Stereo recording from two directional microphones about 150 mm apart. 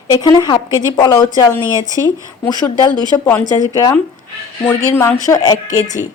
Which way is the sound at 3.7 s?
25° left (ahead or behind).